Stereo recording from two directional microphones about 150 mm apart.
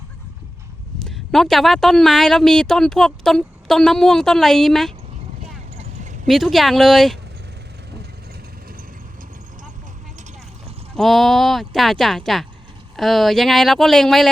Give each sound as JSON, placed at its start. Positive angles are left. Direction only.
{"t": 1.0, "sound": "speech", "side_deg": 0}
{"t": 6.2, "sound": "speech", "side_deg": 0}
{"t": 10.9, "sound": "speech", "side_deg": 0}